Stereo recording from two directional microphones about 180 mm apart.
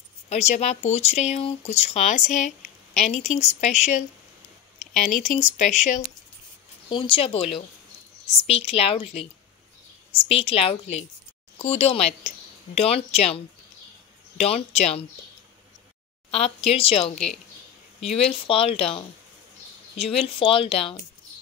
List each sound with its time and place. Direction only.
0.3 s speech: 40° left (ahead or behind)
4.7 s speech: centre (ahead or behind)
5.4 s speech: 40° left (ahead or behind)
6.9 s speech: 30° left (ahead or behind)
8.5 s speech: 35° left (ahead or behind)
16.3 s speech: 35° left (ahead or behind)
17.1 s speech: 5° left (ahead or behind)
18.5 s speech: 30° left (ahead or behind)